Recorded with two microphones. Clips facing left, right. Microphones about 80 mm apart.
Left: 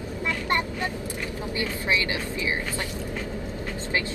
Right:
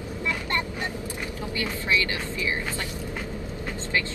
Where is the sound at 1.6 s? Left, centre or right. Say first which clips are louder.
Even; left.